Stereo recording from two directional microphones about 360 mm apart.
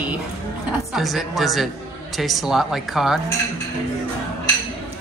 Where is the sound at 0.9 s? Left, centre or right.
Centre.